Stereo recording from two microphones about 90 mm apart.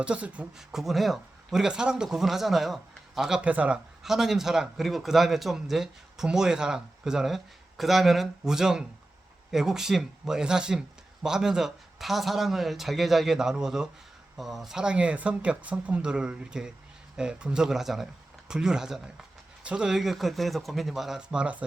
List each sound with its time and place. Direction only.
0.0 s speech: 15° right (ahead or behind)
0.7 s a man's voice: 5° right (ahead or behind)
4.0 s a man's voice: 5° right (ahead or behind)